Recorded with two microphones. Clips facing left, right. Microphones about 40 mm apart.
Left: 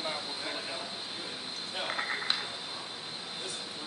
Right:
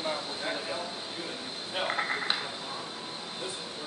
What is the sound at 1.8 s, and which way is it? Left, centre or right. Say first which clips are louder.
Speech: right 3 dB; centre.